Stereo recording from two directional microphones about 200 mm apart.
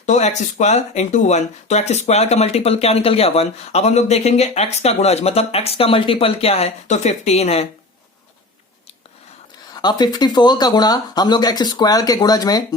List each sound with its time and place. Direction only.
0.0 s speech: 35° left (ahead or behind)
9.8 s speech: 20° left (ahead or behind)